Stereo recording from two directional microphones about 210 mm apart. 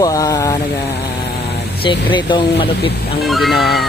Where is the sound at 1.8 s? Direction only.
25° left (ahead or behind).